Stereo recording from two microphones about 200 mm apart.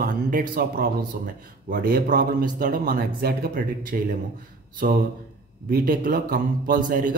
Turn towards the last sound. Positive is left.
turn(degrees=-40)  # may be behind; listen again after turning